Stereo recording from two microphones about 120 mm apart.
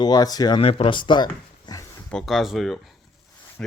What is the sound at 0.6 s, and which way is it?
Speech, 50° left (ahead or behind).